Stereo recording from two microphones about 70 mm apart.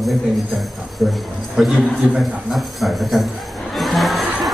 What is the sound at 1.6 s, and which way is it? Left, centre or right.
A man's voice, centre.